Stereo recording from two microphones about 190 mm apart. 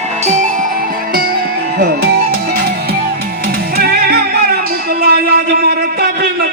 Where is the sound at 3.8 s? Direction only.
55° right (ahead or behind).